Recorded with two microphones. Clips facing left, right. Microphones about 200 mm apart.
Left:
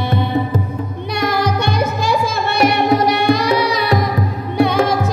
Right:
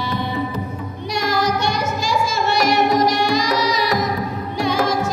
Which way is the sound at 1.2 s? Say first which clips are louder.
Left 2 dB; 60° left (ahead or behind).